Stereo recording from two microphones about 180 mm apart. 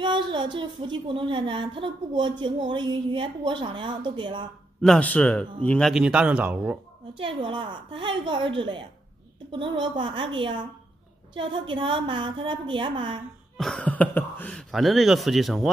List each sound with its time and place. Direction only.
0.0 s speech: 25° right (ahead or behind)
4.8 s speech: 5° left (ahead or behind)
7.2 s speech: 30° right (ahead or behind)
13.6 s speech: 5° left (ahead or behind)